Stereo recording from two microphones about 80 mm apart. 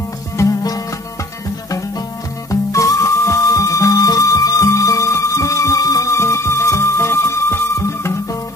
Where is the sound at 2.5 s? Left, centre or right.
Left.